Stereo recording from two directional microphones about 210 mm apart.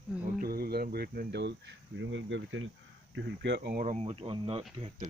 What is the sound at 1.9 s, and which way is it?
Speech, 60° right (ahead or behind).